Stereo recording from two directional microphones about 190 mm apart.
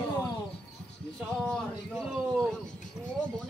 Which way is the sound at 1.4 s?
5° left (ahead or behind).